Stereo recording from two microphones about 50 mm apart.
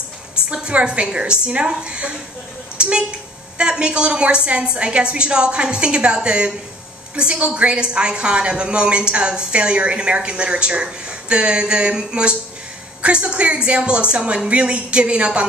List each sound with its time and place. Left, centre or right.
0.5 s a woman's voice: right